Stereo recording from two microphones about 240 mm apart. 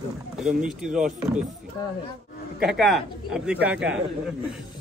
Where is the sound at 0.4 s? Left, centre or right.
Centre.